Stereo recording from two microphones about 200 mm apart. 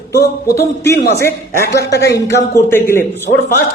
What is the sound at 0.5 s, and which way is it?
Speech, 15° left (ahead or behind).